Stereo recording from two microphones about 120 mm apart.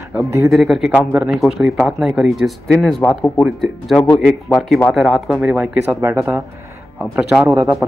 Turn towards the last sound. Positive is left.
turn(degrees=-25)  # may be behind; listen again after turning